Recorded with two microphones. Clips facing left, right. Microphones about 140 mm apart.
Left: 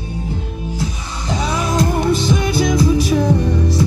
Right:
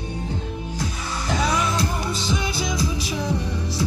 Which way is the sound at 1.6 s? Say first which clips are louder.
Left 7 dB; 45° left (ahead or behind).